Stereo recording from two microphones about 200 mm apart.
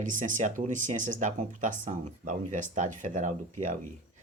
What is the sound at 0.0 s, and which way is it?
Speech, 40° right (ahead or behind).